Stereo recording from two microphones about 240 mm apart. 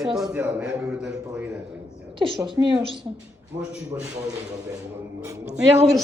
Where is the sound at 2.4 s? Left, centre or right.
Centre.